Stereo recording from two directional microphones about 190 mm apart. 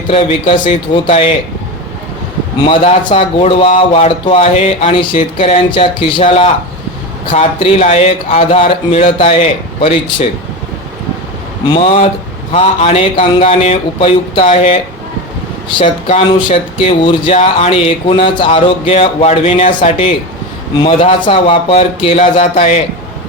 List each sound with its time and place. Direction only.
0.1 s speech: 30° left (ahead or behind)
2.6 s speech: 30° left (ahead or behind)
12.5 s speech: 35° left (ahead or behind)
15.8 s speech: 35° left (ahead or behind)
21.2 s speech: 30° left (ahead or behind)